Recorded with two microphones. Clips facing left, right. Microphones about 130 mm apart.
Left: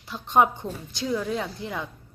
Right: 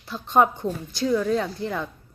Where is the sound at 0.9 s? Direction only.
15° left (ahead or behind).